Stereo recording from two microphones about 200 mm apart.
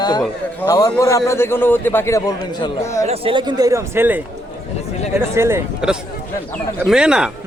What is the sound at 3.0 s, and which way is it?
Speech, 30° right (ahead or behind).